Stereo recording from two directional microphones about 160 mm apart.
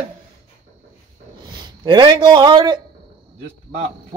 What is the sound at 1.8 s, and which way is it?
Speech, 25° right (ahead or behind).